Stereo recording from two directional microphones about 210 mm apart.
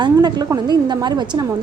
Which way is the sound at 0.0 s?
20° right (ahead or behind).